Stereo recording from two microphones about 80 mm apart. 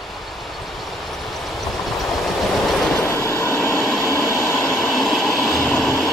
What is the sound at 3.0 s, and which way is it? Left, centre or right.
Vehicle, left.